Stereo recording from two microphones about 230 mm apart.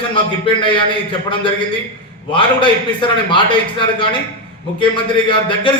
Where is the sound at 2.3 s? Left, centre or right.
Left.